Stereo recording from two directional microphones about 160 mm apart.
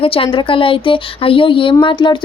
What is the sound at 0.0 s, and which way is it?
Speech, 35° left (ahead or behind).